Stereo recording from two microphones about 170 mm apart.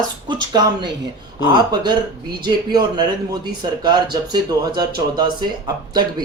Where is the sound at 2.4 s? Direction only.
25° right (ahead or behind).